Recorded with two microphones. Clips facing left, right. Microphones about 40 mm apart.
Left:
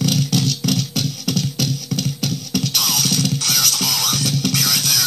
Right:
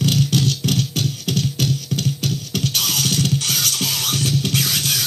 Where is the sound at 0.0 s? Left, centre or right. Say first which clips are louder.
Even; right.